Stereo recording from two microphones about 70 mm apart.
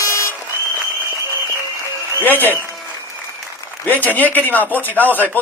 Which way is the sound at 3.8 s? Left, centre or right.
Left.